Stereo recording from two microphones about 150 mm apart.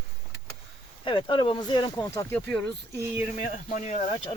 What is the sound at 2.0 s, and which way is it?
Speech, 15° left (ahead or behind).